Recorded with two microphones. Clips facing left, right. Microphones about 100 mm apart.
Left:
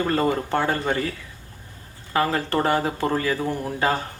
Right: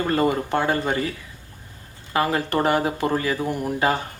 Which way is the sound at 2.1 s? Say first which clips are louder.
Even; 15° right (ahead or behind).